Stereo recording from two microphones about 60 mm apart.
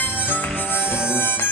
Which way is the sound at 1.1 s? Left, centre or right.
Left.